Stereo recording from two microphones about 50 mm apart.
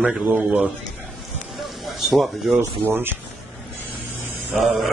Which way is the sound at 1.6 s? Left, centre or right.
Centre.